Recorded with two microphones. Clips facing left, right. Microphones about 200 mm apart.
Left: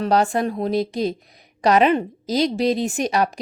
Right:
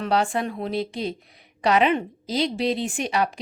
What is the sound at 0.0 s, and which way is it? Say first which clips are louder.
A woman's voice: left 4 dB; 40° left (ahead or behind).